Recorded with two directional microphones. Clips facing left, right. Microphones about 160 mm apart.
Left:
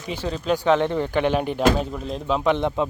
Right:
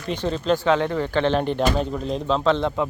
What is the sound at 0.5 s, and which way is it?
Speech, 15° left (ahead or behind).